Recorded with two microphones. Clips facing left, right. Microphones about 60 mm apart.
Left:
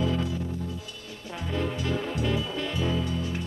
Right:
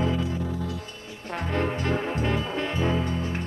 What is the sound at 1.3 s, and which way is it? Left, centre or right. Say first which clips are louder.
Music: right 4 dB; right.